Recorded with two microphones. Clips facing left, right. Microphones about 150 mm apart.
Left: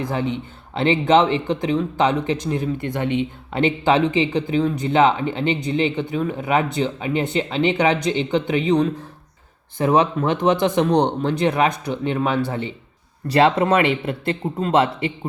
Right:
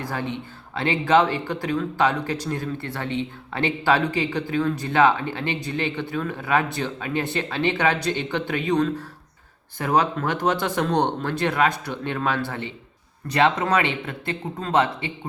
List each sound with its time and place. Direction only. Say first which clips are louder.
0.0 s speech: left 5 dB; 20° left (ahead or behind)
13.2 s speech: left 4 dB; 30° left (ahead or behind)